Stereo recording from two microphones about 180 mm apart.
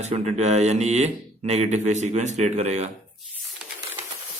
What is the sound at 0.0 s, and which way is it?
A man's voice, 35° right (ahead or behind).